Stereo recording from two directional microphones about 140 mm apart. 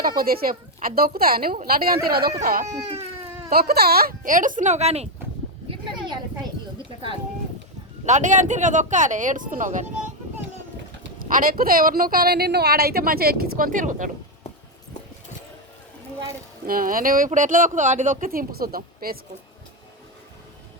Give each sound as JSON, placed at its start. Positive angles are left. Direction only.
{"t": 0.0, "sound": "speech", "side_deg": -90}
{"t": 2.4, "sound": "speech", "side_deg": -75}
{"t": 3.5, "sound": "speech", "side_deg": -90}
{"t": 5.8, "sound": "a sound", "side_deg": -30}
{"t": 8.0, "sound": "speech", "side_deg": -60}
{"t": 11.2, "sound": "speech", "side_deg": -90}
{"t": 16.6, "sound": "speech", "side_deg": -90}